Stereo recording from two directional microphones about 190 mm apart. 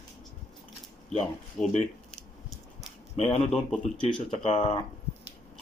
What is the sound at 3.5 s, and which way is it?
Speech, 5° left (ahead or behind).